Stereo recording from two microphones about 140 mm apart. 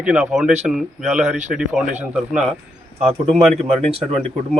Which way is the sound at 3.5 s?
45° right (ahead or behind).